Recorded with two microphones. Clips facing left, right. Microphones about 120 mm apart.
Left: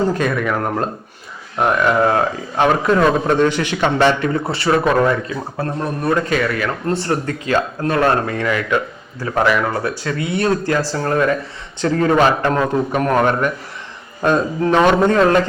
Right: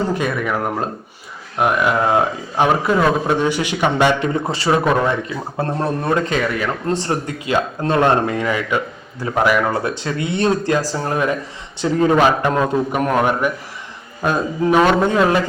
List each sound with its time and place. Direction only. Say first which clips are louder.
0.1 s a man's voice: left 1 dB; 10° right (ahead or behind)
5.5 s a man's voice: right 3 dB; 30° right (ahead or behind); by 9.6 s 10° right (ahead or behind)
9.7 s a man's voice: even; 25° right (ahead or behind); by 15.4 s 10° right (ahead or behind)